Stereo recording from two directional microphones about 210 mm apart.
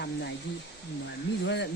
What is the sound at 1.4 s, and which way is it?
Speech, 55° left (ahead or behind).